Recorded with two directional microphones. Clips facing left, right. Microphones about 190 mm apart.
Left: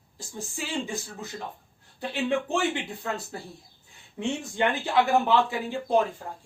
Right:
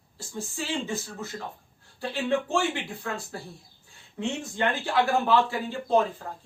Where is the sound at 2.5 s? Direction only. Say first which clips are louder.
Even; 20° left (ahead or behind).